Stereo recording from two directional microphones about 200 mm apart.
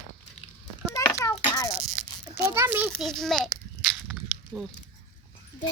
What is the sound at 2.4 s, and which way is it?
Speech, 15° right (ahead or behind).